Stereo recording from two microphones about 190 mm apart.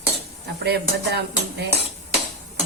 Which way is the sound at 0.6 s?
60° right (ahead or behind).